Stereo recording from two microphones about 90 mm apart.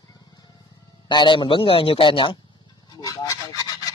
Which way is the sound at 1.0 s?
60° left (ahead or behind).